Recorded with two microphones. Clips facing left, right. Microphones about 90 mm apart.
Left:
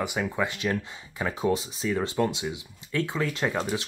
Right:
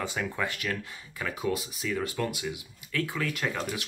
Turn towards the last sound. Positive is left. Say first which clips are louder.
# left 4 dB
turn(degrees=30)  # may be behind; listen again after turning